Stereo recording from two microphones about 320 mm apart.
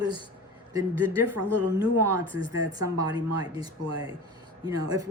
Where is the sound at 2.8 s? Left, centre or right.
Centre.